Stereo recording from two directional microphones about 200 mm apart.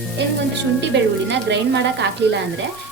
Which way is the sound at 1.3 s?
60° right (ahead or behind).